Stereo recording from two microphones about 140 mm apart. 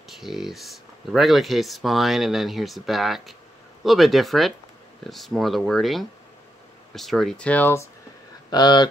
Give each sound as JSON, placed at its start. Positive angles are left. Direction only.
{"t": 0.2, "sound": "speech", "side_deg": 0}
{"t": 8.5, "sound": "speech", "side_deg": 30}